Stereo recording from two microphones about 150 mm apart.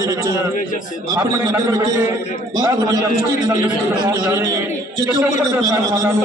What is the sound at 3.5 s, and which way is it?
A man's voice, 20° right (ahead or behind).